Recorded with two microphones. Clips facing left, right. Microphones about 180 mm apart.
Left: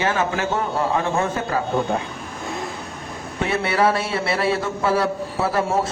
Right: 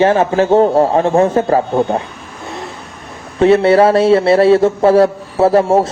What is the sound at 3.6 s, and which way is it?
Speech, 35° right (ahead or behind).